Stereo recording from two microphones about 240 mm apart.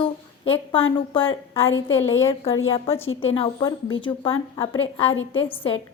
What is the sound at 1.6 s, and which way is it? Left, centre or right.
Speech, left.